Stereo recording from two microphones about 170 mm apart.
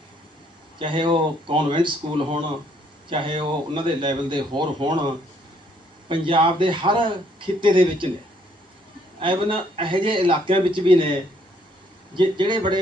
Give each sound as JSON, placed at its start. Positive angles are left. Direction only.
{"t": 0.8, "sound": "a man's voice", "side_deg": -30}
{"t": 6.1, "sound": "a man's voice", "side_deg": -30}
{"t": 9.2, "sound": "a man's voice", "side_deg": -30}